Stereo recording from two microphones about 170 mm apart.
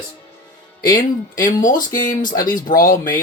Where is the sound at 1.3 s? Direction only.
50° left (ahead or behind).